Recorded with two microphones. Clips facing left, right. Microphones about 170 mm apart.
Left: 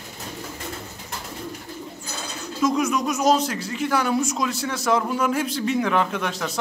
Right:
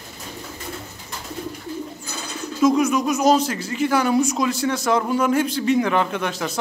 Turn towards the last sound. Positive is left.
turn(degrees=0)  # may be behind; listen again after turning